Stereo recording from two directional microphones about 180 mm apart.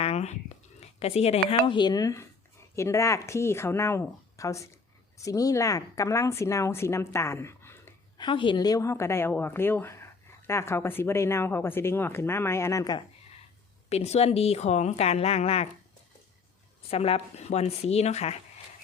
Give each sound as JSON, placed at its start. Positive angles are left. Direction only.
{"t": 0.0, "sound": "a sound", "side_deg": 35}
{"t": 1.5, "sound": "a woman's voice", "side_deg": 25}
{"t": 8.2, "sound": "a woman's voice", "side_deg": 25}
{"t": 13.9, "sound": "speech", "side_deg": 35}
{"t": 16.9, "sound": "speech", "side_deg": 35}